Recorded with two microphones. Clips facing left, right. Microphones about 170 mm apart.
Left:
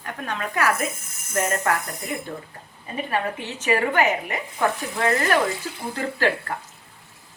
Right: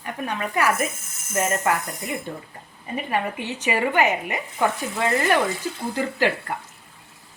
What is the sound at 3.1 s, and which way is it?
Speech, 15° right (ahead or behind).